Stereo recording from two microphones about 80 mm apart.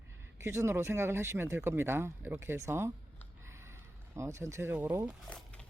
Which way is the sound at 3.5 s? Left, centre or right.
Right.